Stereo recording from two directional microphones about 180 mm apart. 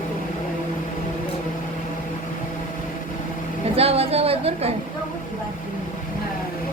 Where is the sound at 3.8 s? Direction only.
35° right (ahead or behind).